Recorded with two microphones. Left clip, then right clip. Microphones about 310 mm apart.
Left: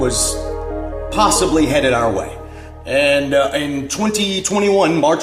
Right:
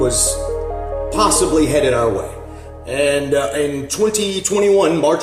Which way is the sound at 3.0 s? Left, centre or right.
Centre.